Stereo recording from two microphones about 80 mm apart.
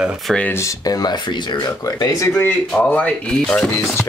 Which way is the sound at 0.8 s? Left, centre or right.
Left.